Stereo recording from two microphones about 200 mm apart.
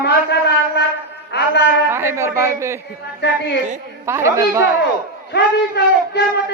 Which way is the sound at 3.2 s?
60° left (ahead or behind).